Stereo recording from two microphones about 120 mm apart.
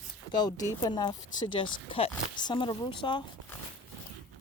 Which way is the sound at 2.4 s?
40° left (ahead or behind).